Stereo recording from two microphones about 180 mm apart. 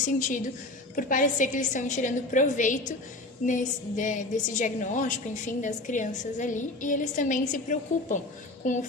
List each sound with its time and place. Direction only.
0.0 s a woman's voice: 45° left (ahead or behind)